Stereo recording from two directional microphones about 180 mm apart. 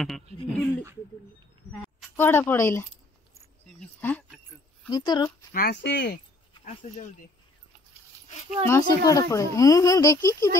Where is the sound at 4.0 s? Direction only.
10° left (ahead or behind).